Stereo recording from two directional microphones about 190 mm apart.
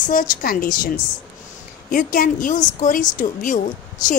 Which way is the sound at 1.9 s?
45° left (ahead or behind).